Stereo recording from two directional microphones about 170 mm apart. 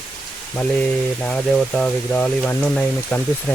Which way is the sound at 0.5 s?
5° left (ahead or behind).